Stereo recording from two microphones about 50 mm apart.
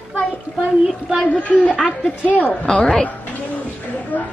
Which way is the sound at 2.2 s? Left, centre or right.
Left.